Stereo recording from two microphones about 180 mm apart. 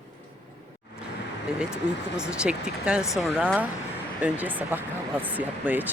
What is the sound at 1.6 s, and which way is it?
Speech, 5° right (ahead or behind).